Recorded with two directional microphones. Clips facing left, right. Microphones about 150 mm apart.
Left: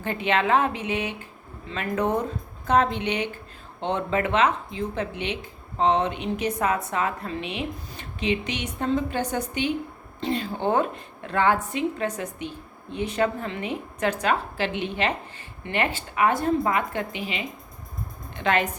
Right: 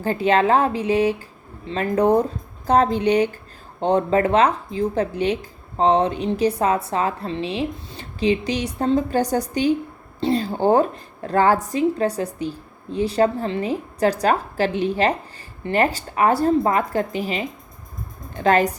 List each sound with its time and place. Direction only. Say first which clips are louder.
0.0 s speech: right 6 dB; 35° right (ahead or behind)